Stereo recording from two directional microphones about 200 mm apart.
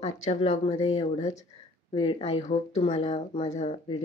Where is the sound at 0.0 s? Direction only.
35° left (ahead or behind).